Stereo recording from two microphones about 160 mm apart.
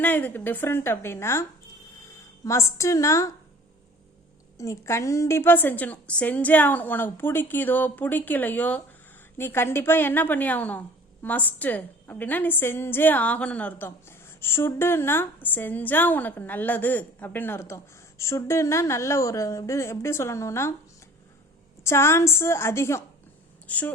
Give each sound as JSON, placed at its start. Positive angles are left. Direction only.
{"t": 0.0, "sound": "a woman's voice", "side_deg": 10}
{"t": 4.5, "sound": "a woman's voice", "side_deg": 20}
{"t": 21.8, "sound": "a woman's voice", "side_deg": 15}